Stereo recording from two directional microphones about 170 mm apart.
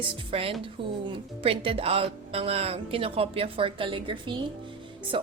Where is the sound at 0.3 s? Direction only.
35° right (ahead or behind).